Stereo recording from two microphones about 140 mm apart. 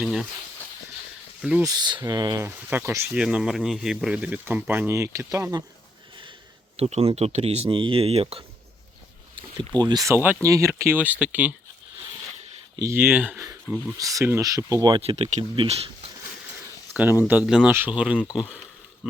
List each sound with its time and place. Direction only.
0.0 s snake: 5° right (ahead or behind)
1.4 s speech: 5° right (ahead or behind)
1.6 s speech: 30° right (ahead or behind)
3.2 s speech: 5° right (ahead or behind); by 5.6 s 25° right (ahead or behind)
6.7 s speech: 50° right (ahead or behind)
9.3 s speech: 35° right (ahead or behind); by 11.5 s 10° right (ahead or behind)
12.9 s speech: 15° right (ahead or behind)
15.0 s speech: 50° right (ahead or behind)
16.9 s speech: 15° right (ahead or behind)